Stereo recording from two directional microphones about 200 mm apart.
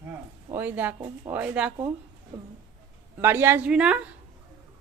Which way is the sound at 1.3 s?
5° right (ahead or behind).